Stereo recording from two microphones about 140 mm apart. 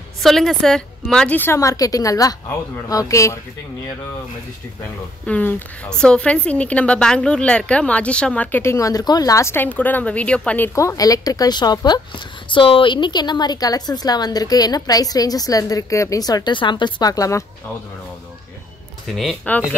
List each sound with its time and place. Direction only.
0.2 s a woman's voice: centre (ahead or behind); by 3.3 s 20° left (ahead or behind)
5.2 s a woman's voice: 10° left (ahead or behind)
19.1 s speech: centre (ahead or behind)
19.5 s a woman's voice: 10° left (ahead or behind)